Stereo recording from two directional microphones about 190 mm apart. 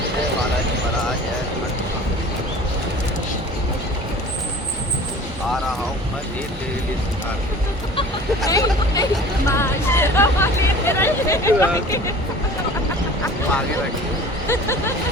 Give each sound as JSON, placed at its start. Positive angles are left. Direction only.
{"t": 8.4, "sound": "a sound", "side_deg": 15}
{"t": 9.5, "sound": "hubbub", "side_deg": 15}
{"t": 14.4, "sound": "speech", "side_deg": 15}